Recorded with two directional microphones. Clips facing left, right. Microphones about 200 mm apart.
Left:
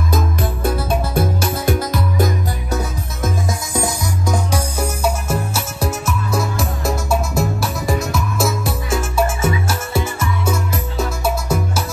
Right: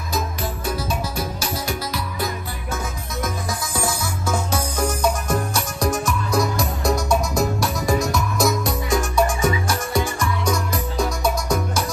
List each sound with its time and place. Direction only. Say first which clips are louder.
0.1 s music: left 3 dB; 55° left (ahead or behind)
3.7 s music: left 4 dB; 20° left (ahead or behind)